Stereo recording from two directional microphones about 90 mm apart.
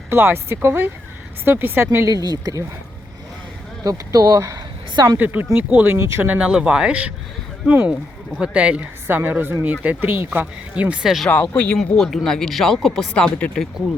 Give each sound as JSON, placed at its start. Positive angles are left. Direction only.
{"t": 0.1, "sound": "a woman's voice", "side_deg": -25}
{"t": 2.2, "sound": "speech", "side_deg": -45}
{"t": 3.8, "sound": "speech", "side_deg": -40}
{"t": 5.1, "sound": "a woman's voice", "side_deg": -20}
{"t": 6.2, "sound": "a woman's voice", "side_deg": -15}
{"t": 11.4, "sound": "speech", "side_deg": 10}